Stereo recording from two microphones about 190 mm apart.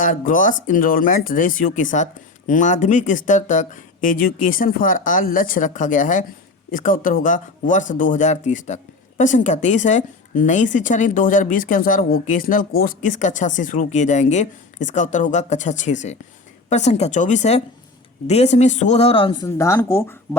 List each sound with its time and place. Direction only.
0.0 s speech: 45° left (ahead or behind); by 19.5 s 25° left (ahead or behind)
19.5 s speech: 15° left (ahead or behind)